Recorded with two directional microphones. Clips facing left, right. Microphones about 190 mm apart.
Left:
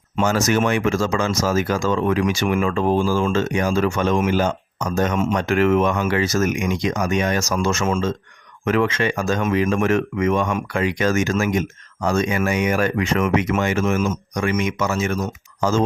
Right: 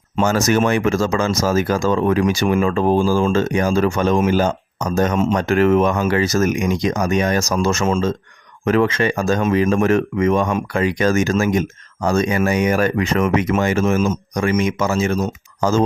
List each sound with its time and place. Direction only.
0.2 s speech: 40° right (ahead or behind)